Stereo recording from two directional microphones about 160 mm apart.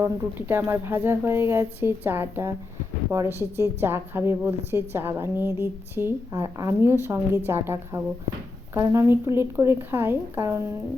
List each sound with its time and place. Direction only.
0.0 s a woman's voice: 15° right (ahead or behind)